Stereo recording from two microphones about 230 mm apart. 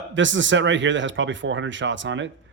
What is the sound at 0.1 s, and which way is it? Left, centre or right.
Speech, right.